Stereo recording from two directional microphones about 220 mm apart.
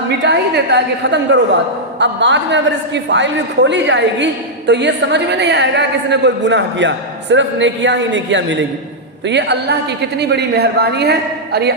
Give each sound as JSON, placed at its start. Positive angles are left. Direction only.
{"t": 0.2, "sound": "a woman's voice", "side_deg": -50}